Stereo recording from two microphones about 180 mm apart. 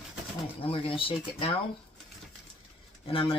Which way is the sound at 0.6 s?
30° left (ahead or behind).